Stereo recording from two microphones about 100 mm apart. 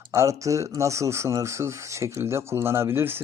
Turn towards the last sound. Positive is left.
turn(degrees=-25)  # may be behind; listen again after turning